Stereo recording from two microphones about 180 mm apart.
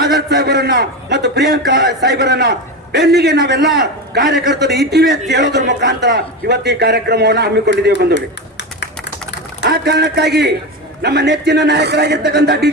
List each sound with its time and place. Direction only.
0.0 s a man's voice: 65° right (ahead or behind)
9.6 s a man's voice: 65° right (ahead or behind)